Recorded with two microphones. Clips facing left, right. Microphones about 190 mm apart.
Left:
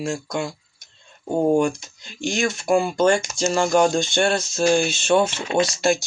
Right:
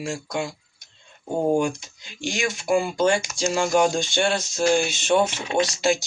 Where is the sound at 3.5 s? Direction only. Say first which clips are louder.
Left 2 dB; 10° right (ahead or behind).